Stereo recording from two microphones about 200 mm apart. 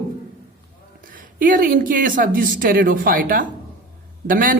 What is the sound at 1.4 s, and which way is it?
Speech, 45° right (ahead or behind).